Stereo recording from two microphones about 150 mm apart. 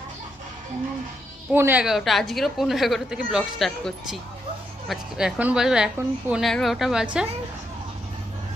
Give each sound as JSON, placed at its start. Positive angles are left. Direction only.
{"t": 1.5, "sound": "a woman's voice", "side_deg": -15}
{"t": 1.8, "sound": "a woman's voice", "side_deg": 0}
{"t": 6.4, "sound": "a woman's voice", "side_deg": 0}